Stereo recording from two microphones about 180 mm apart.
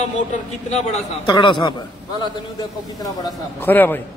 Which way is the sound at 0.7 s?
35° left (ahead or behind).